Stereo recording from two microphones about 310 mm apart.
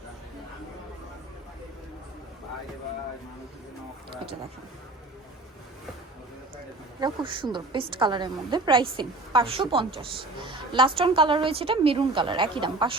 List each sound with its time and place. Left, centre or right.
7.0 s a woman's voice: centre